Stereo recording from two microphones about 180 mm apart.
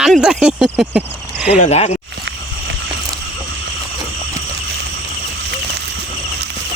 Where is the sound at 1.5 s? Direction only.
40° left (ahead or behind).